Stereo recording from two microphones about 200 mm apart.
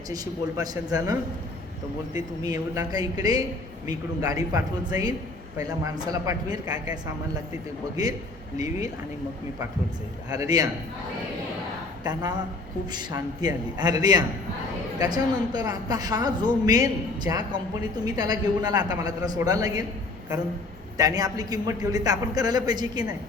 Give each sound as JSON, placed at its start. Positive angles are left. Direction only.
{"t": 0.1, "sound": "a woman's voice", "side_deg": -20}
{"t": 2.4, "sound": "a woman's voice", "side_deg": -20}
{"t": 8.0, "sound": "a woman's voice", "side_deg": -20}
{"t": 10.2, "sound": "a woman's voice", "side_deg": -20}
{"t": 12.1, "sound": "a woman's voice", "side_deg": -20}
{"t": 21.0, "sound": "a woman's voice", "side_deg": -20}